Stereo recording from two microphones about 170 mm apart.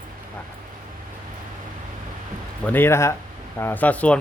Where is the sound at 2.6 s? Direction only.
10° left (ahead or behind).